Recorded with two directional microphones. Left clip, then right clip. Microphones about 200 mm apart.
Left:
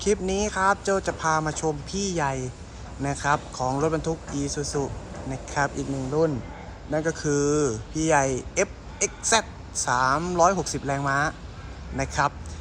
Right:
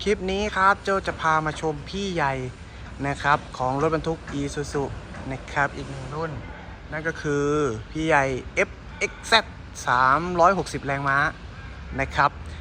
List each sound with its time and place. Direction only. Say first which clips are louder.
0.0 s speech: even; 15° left (ahead or behind)
6.9 s speech: left 1 dB; 20° left (ahead or behind)